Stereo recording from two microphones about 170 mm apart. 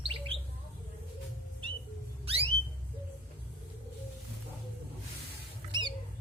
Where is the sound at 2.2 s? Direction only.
35° right (ahead or behind).